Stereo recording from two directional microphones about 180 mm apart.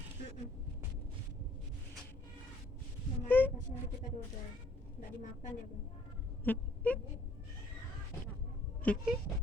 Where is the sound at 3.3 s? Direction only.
10° left (ahead or behind).